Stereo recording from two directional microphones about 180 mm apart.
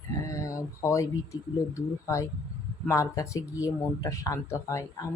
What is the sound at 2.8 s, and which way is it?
Speech, 15° left (ahead or behind).